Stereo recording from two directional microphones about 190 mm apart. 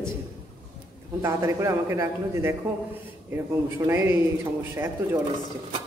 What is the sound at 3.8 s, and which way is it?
A man's voice, 15° right (ahead or behind).